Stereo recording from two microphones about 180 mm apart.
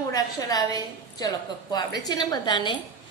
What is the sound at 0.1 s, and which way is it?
Speech, 20° left (ahead or behind).